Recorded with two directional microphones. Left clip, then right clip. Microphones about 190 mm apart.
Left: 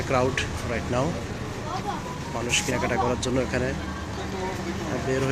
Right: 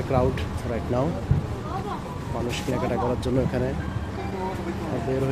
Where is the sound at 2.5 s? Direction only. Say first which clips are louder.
Left 4 dB; 10° right (ahead or behind).